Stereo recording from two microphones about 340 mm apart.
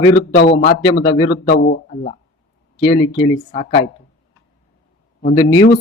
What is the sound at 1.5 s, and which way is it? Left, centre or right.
Speech, left.